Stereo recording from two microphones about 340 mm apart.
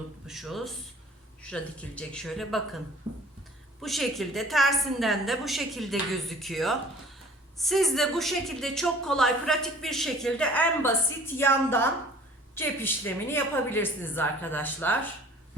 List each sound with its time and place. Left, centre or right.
0.3 s a woman's voice: centre